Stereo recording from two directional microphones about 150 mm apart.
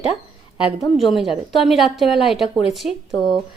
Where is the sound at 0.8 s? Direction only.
Centre (ahead or behind).